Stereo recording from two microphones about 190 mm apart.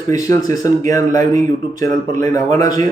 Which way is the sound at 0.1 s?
20° left (ahead or behind).